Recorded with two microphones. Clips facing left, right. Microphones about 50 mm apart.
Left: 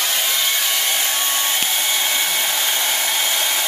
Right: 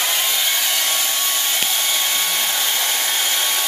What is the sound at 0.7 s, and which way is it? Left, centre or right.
Hair dryer, centre.